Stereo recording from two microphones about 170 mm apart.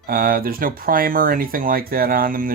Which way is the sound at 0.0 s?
60° right (ahead or behind).